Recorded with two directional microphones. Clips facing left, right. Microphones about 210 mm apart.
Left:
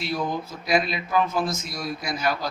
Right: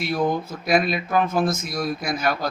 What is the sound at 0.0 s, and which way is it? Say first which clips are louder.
Speech: right 5 dB; 50° right (ahead or behind).